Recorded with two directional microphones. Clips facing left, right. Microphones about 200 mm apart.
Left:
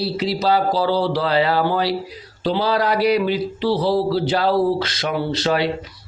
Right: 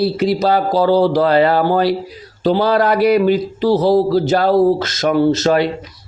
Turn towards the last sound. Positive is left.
turn(degrees=-45)  # may be behind; listen again after turning